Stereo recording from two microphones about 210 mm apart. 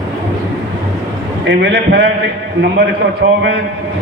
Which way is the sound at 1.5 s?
50° right (ahead or behind).